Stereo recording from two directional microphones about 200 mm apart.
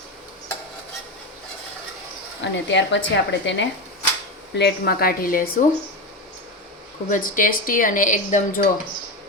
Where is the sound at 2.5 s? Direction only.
65° left (ahead or behind).